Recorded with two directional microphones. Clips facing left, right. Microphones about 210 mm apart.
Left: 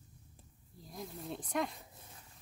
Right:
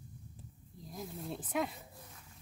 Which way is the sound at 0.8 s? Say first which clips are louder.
Right 1 dB; centre (ahead or behind).